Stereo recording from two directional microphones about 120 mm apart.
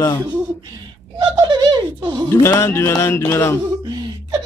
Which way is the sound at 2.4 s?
20° left (ahead or behind).